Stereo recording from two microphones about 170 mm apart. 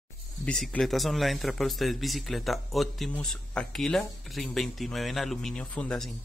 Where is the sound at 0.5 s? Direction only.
5° left (ahead or behind).